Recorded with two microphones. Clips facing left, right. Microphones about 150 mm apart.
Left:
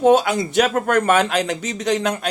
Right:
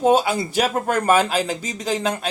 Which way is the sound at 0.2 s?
30° right (ahead or behind).